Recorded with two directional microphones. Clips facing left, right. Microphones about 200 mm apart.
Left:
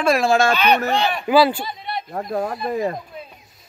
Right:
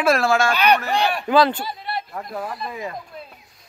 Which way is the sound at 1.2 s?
10° left (ahead or behind).